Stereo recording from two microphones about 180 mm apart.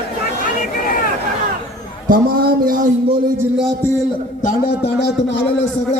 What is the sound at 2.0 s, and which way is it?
Speech, 55° right (ahead or behind).